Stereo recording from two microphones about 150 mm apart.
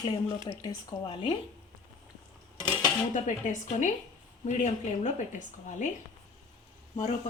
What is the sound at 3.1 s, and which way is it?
A woman's voice, 55° left (ahead or behind).